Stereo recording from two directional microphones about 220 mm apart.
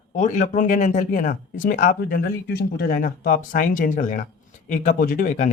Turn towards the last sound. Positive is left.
turn(degrees=35)  # may be behind; listen again after turning